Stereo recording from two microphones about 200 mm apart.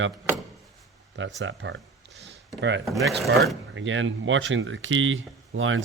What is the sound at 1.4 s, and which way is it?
Speech, 70° right (ahead or behind).